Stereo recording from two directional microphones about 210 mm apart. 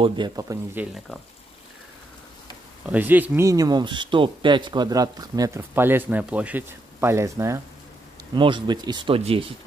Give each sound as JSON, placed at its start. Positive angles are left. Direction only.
{"t": 0.0, "sound": "speech", "side_deg": -20}
{"t": 0.9, "sound": "speech", "side_deg": 5}
{"t": 2.9, "sound": "speech", "side_deg": -10}